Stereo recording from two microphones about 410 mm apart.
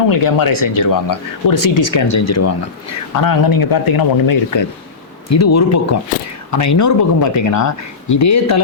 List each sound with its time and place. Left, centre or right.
0.1 s speech: left
3.2 s speech: left
5.3 s speech: left